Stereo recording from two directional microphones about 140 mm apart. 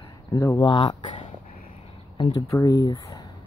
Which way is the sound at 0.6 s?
35° left (ahead or behind).